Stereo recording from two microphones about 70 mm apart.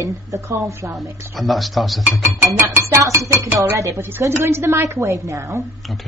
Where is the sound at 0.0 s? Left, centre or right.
Right.